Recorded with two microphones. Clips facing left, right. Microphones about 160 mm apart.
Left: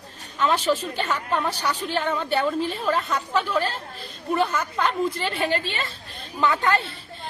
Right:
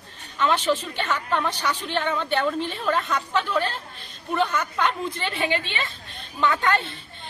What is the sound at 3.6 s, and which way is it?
Speech, 40° left (ahead or behind).